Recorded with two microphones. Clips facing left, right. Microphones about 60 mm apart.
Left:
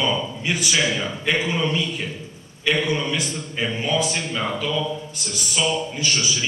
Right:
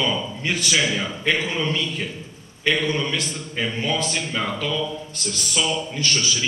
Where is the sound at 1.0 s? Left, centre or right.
Left.